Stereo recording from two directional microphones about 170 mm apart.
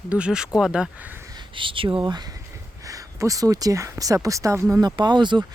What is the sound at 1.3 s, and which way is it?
Speech, 30° right (ahead or behind).